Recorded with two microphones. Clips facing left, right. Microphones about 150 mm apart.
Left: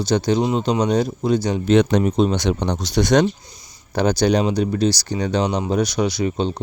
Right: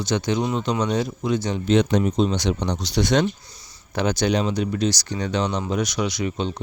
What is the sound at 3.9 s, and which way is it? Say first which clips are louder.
Speech: left 4 dB; 35° left (ahead or behind).